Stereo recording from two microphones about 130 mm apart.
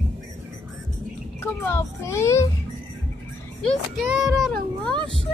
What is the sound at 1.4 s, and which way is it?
A child's voice, 20° left (ahead or behind).